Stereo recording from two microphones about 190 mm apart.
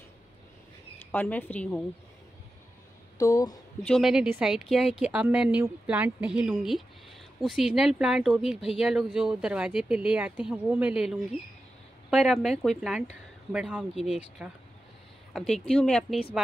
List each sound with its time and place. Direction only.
1.1 s a woman's voice: 10° left (ahead or behind)
3.2 s a woman's voice: 20° left (ahead or behind)
3.8 s a woman's voice: centre (ahead or behind)